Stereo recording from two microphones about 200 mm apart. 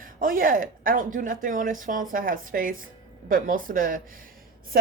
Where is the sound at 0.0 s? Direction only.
45° right (ahead or behind).